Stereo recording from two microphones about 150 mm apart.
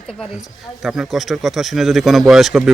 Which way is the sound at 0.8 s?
Centre (ahead or behind).